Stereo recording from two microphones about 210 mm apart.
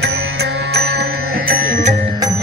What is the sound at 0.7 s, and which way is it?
Music, 50° right (ahead or behind).